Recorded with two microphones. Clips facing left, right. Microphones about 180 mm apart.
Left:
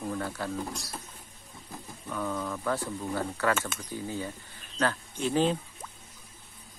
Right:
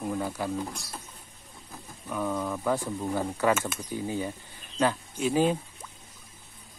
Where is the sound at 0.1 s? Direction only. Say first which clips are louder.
Right 4 dB; 10° right (ahead or behind).